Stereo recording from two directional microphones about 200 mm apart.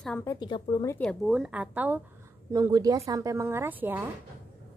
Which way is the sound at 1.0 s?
Centre (ahead or behind).